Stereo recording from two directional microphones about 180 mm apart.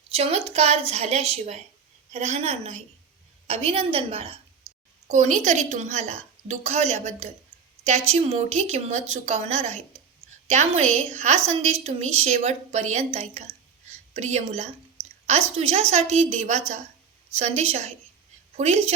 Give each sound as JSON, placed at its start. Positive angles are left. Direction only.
{"t": 0.1, "sound": "a woman's voice", "side_deg": -35}
{"t": 5.0, "sound": "a woman's voice", "side_deg": -40}